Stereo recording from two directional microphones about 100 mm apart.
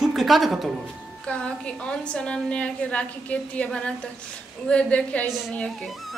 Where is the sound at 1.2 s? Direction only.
10° left (ahead or behind).